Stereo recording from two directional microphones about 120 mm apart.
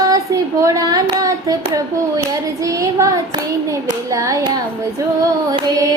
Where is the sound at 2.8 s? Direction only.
25° right (ahead or behind).